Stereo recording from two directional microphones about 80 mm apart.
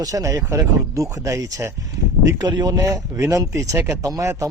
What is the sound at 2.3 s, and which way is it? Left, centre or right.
Speech, right.